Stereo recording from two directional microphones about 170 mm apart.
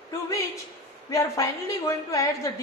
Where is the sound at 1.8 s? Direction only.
20° left (ahead or behind).